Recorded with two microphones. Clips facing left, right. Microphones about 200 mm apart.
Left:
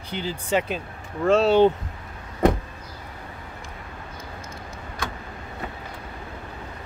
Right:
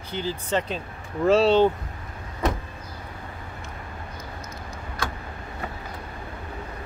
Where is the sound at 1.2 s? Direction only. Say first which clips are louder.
Even; centre (ahead or behind).